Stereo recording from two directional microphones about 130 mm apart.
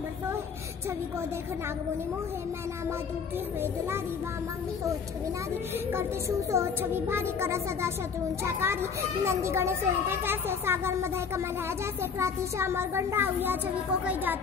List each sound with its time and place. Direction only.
5.9 s a woman's voice: 20° right (ahead or behind)